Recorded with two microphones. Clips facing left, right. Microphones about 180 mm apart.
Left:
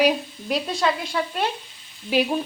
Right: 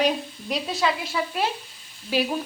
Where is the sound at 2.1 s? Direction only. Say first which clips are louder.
Left 3 dB; 20° left (ahead or behind).